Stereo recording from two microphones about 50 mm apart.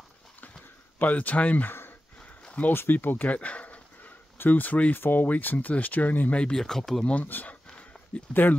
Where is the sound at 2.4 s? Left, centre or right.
Left.